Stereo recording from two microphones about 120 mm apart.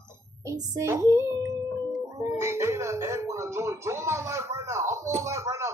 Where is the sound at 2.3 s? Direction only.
25° right (ahead or behind).